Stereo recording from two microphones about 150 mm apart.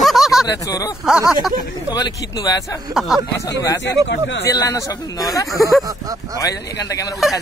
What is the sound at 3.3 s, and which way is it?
A man's voice, 20° left (ahead or behind).